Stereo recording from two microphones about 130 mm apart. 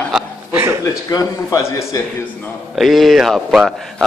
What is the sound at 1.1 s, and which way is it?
Speech, 25° left (ahead or behind).